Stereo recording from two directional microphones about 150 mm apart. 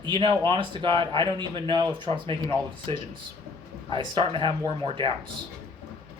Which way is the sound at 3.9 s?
35° right (ahead or behind).